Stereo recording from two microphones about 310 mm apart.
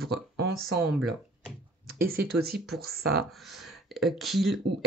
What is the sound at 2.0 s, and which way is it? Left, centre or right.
Speech, right.